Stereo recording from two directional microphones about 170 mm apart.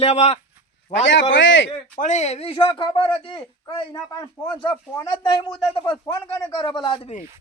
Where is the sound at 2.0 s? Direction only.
45° left (ahead or behind).